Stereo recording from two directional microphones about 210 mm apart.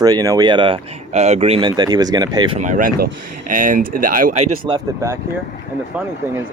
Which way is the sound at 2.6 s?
40° right (ahead or behind).